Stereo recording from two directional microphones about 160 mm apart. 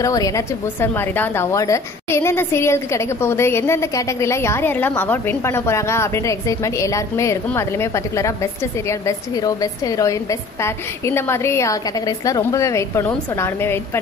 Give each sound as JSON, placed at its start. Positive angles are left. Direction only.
{"t": 0.0, "sound": "a woman's voice", "side_deg": 20}